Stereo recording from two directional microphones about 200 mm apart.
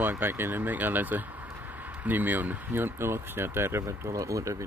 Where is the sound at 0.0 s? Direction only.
10° right (ahead or behind).